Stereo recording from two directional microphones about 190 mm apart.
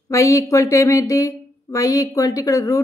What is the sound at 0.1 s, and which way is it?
A woman's voice, 15° left (ahead or behind).